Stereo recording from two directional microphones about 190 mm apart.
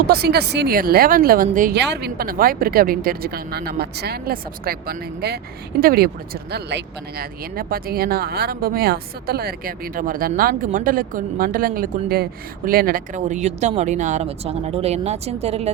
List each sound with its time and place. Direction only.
0.1 s speech: 55° right (ahead or behind)
1.8 s speech: 60° right (ahead or behind); by 15.7 s 35° right (ahead or behind)